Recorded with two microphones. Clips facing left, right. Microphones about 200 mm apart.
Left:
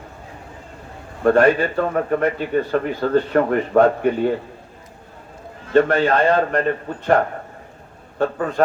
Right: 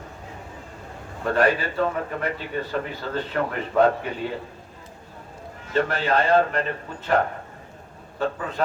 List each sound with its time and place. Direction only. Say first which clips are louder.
1.2 s speech: left 7 dB; 50° left (ahead or behind)
5.7 s speech: left 7 dB; 50° left (ahead or behind)
8.2 s speech: left 7 dB; 50° left (ahead or behind)